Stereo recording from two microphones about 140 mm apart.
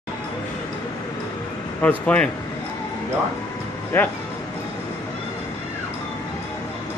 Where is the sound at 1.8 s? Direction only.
10° left (ahead or behind).